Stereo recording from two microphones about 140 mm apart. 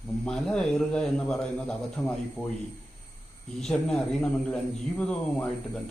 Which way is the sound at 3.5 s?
5° left (ahead or behind).